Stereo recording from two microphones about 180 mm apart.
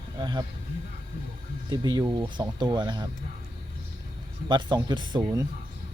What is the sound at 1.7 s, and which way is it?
Speech, 25° right (ahead or behind).